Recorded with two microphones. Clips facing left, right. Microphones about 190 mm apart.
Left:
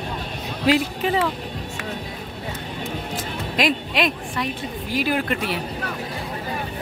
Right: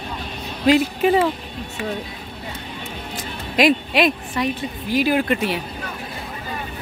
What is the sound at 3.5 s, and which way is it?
Speech, 5° right (ahead or behind).